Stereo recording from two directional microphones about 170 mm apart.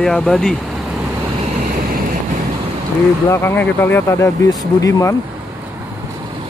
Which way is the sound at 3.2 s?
15° left (ahead or behind).